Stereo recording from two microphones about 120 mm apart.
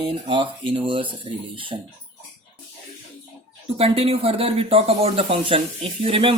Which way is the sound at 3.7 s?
55° right (ahead or behind).